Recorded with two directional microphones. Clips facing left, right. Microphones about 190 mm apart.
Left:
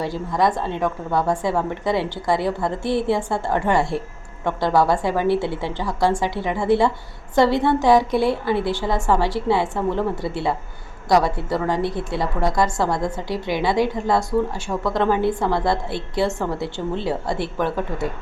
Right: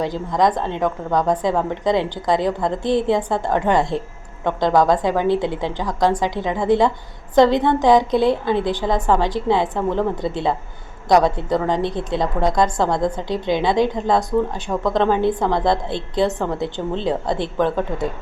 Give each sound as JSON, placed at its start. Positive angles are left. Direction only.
{"t": 0.0, "sound": "a woman's voice", "side_deg": -20}